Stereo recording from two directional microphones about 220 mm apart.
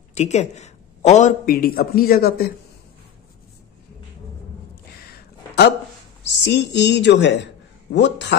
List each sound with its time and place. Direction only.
0.1 s a man's voice: 30° left (ahead or behind)
6.2 s a woman's voice: 55° left (ahead or behind)